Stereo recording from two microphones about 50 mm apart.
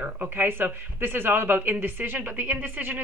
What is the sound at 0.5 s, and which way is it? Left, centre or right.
Speech, right.